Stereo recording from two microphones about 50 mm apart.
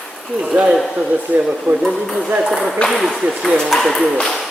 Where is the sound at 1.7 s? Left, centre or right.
Right.